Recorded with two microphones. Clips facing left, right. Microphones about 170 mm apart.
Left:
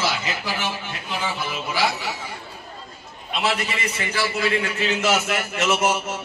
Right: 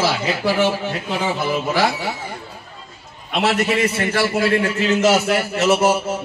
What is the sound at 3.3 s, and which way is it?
A man's voice, 60° right (ahead or behind).